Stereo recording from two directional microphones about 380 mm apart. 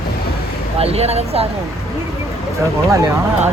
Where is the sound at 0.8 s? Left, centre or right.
Centre.